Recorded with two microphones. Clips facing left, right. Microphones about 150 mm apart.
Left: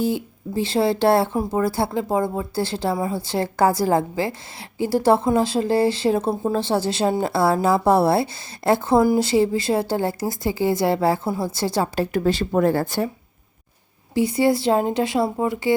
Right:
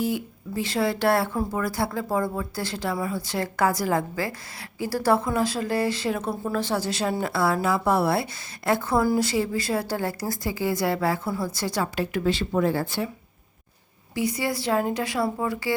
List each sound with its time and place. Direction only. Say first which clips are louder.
0.0 s speech: left 4 dB; 30° left (ahead or behind); by 13.1 s 45° left (ahead or behind)
14.1 s speech: left 8 dB; 25° left (ahead or behind)